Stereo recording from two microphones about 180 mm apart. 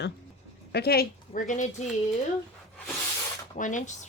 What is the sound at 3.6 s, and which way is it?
Speech, 45° left (ahead or behind).